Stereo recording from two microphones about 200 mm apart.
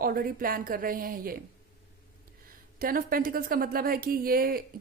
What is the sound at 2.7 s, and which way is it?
A woman's voice, 45° right (ahead or behind).